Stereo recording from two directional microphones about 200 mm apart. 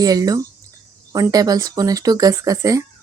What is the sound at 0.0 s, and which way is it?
Speech, 20° right (ahead or behind).